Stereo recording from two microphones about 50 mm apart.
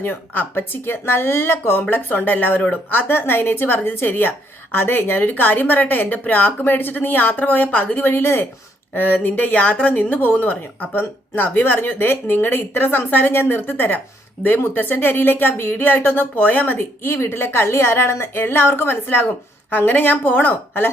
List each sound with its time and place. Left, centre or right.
0.0 s a woman's voice: left
8.0 s a woman's voice: left
9.0 s a woman's voice: left
16.7 s a woman's voice: left